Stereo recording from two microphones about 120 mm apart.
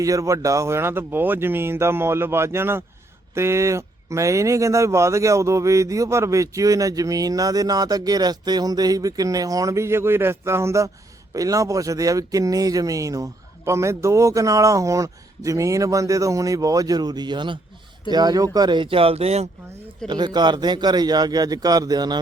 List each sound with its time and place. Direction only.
0.0 s speech: 25° right (ahead or behind); by 19.5 s 60° right (ahead or behind)
20.1 s speech: 35° right (ahead or behind)